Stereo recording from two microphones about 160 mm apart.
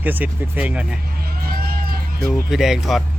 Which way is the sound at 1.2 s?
70° right (ahead or behind).